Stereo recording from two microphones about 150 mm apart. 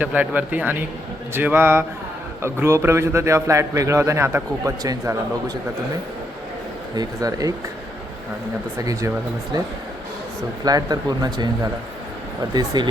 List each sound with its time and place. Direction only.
0.0 s a man's voice: 10° right (ahead or behind)
6.9 s a man's voice: 25° right (ahead or behind)
8.8 s a man's voice: 25° right (ahead or behind)
10.6 s a man's voice: 25° right (ahead or behind)